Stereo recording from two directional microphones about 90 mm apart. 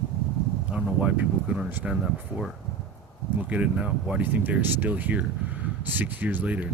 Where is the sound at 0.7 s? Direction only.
10° right (ahead or behind).